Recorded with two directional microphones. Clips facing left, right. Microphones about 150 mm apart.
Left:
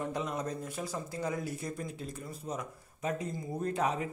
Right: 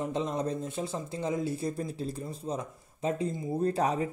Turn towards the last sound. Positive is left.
turn(degrees=-35)  # may be behind; listen again after turning